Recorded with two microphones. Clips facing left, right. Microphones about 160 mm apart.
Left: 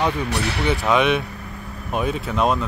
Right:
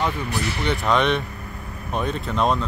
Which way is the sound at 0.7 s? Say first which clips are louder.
Left 2 dB; 5° left (ahead or behind).